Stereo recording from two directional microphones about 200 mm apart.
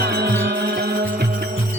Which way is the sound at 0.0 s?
50° right (ahead or behind).